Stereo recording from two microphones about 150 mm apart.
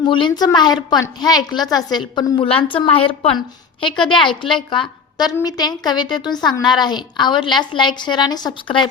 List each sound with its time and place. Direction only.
0.0 s a woman's voice: 30° left (ahead or behind)
3.8 s a woman's voice: 35° left (ahead or behind)